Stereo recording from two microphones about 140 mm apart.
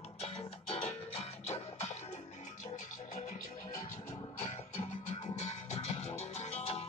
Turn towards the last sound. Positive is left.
turn(degrees=50)  # may be behind; listen again after turning